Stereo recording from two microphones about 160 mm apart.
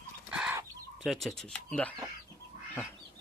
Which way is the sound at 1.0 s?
Centre (ahead or behind).